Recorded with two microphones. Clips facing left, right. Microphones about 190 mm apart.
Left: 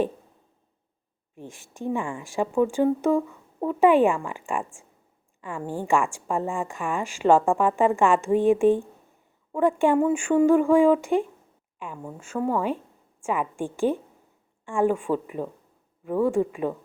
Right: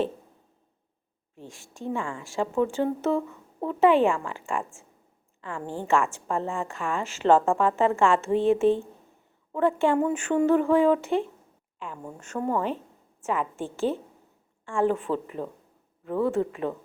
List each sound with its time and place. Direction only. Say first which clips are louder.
1.4 s a woman's voice: left 3 dB; 15° left (ahead or behind)